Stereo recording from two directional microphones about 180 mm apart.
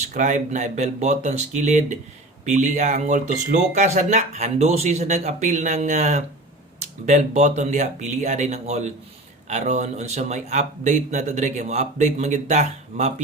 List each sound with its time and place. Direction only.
0.1 s speech: 45° right (ahead or behind)